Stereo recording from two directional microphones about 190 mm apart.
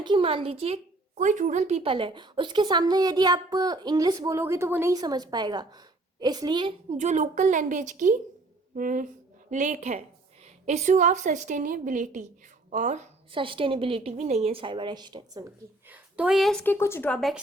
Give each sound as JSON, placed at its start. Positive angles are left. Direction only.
{"t": 0.0, "sound": "a woman's voice", "side_deg": -25}
{"t": 6.9, "sound": "a woman's voice", "side_deg": -40}
{"t": 13.3, "sound": "a woman's voice", "side_deg": -25}
{"t": 15.9, "sound": "speech", "side_deg": -10}